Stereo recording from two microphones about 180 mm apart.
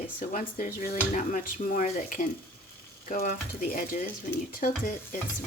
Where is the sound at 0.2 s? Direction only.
45° left (ahead or behind).